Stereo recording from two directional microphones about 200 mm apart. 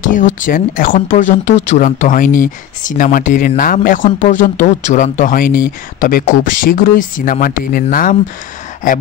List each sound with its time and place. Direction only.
0.4 s speech: 45° left (ahead or behind)